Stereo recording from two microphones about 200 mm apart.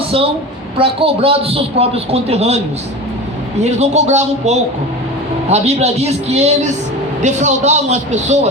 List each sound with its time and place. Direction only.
0.8 s a man's voice: 30° right (ahead or behind)
3.6 s a man's voice: 35° right (ahead or behind)